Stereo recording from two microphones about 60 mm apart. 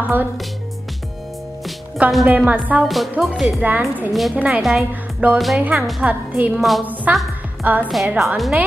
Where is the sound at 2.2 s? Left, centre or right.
Right.